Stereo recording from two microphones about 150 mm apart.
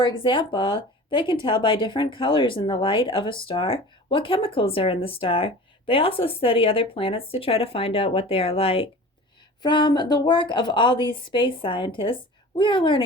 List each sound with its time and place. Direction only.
0.0 s speech: 35° left (ahead or behind)